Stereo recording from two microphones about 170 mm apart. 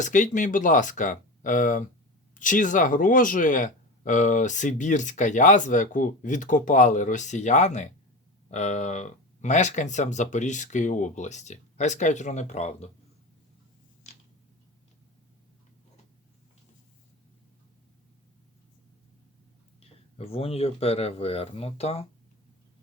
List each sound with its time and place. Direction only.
0.0 s speech: 45° left (ahead or behind)
20.1 s speech: 35° left (ahead or behind)